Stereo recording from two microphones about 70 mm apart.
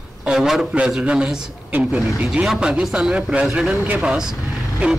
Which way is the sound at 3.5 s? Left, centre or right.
Centre.